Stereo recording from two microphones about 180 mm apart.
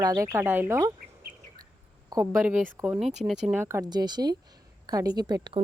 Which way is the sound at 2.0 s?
15° right (ahead or behind).